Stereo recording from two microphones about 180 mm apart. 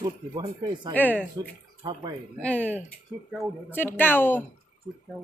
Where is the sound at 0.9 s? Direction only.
10° left (ahead or behind).